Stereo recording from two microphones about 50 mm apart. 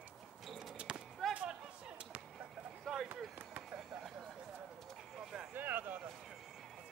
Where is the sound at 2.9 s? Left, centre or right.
Centre.